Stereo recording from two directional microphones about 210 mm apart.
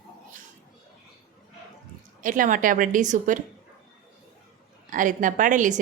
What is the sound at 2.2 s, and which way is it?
A woman's voice, 40° right (ahead or behind).